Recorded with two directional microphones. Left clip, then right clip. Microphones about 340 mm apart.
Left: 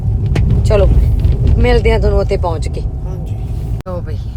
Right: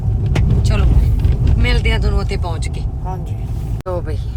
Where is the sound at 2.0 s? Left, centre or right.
Centre.